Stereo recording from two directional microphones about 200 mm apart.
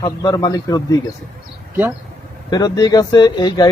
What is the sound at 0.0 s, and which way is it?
Speech, 20° left (ahead or behind).